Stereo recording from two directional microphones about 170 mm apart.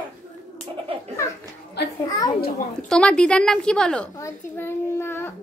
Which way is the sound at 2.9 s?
5° left (ahead or behind).